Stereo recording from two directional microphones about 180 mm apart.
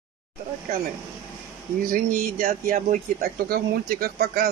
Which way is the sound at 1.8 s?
50° right (ahead or behind).